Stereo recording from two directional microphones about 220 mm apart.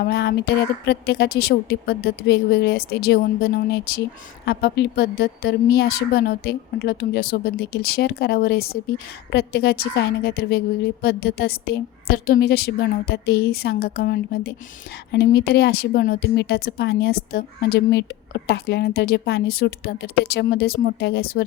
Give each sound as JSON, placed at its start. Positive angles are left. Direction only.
{"t": 0.0, "sound": "speech", "side_deg": 50}